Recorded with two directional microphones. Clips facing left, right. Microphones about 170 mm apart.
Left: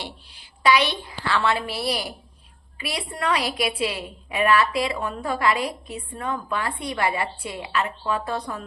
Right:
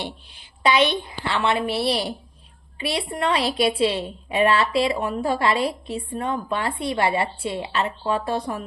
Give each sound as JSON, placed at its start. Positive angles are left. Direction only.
{"t": 0.0, "sound": "a woman's voice", "side_deg": -20}